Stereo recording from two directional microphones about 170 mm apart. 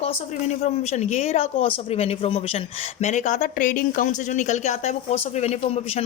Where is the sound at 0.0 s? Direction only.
40° left (ahead or behind).